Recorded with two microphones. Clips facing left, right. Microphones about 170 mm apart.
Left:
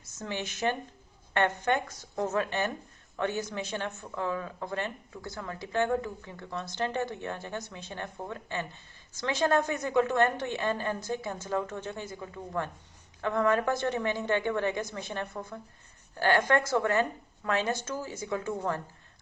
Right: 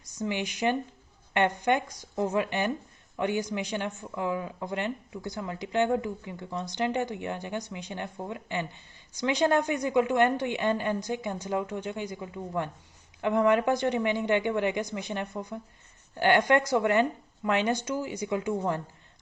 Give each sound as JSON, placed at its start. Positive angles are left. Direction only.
{"t": 0.0, "sound": "speech", "side_deg": -15}